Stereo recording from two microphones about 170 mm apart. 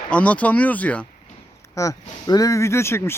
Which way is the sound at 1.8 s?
20° left (ahead or behind).